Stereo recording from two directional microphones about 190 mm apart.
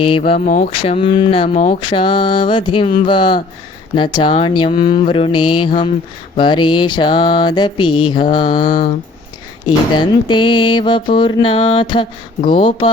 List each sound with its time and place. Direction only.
0.0 s mantra: 30° left (ahead or behind)